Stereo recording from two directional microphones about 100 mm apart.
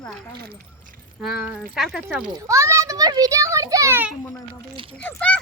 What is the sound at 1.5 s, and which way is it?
Speech, 5° right (ahead or behind).